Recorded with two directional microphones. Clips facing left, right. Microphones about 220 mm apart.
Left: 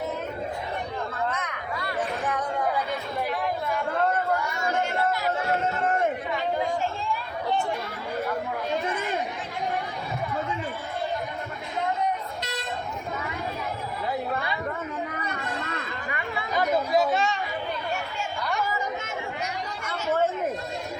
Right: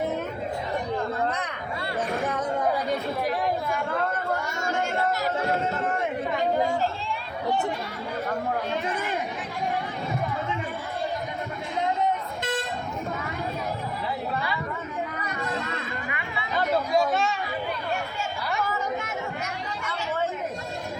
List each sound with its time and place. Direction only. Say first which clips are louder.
1.3 s a sound: right 1 dB; 30° right (ahead or behind)
4.4 s chatter: left 1 dB; 45° right (ahead or behind)
16.0 s chatter: left 2 dB; 40° left (ahead or behind)
16.9 s chatter: even; centre (ahead or behind)